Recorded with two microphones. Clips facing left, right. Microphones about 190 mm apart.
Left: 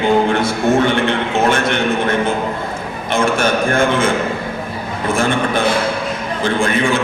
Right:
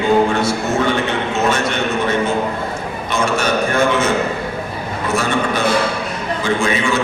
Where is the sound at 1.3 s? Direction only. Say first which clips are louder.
Left 1 dB; 55° left (ahead or behind).